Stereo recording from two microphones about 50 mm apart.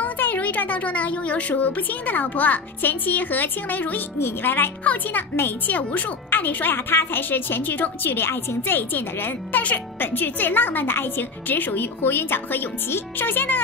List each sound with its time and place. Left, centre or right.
0.0 s a sound: left
1.6 s a child's voice: left
4.9 s a child's voice: left